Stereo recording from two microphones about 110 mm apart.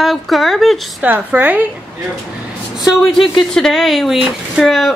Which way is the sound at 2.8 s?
Centre (ahead or behind).